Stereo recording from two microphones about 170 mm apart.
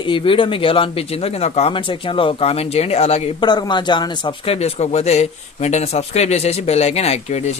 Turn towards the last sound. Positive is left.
turn(degrees=40)  # may be behind; listen again after turning